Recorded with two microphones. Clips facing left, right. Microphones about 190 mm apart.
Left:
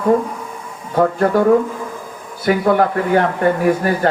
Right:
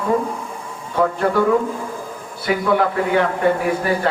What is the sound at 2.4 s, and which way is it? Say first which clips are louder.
A man's voice: left 3 dB; 45° left (ahead or behind).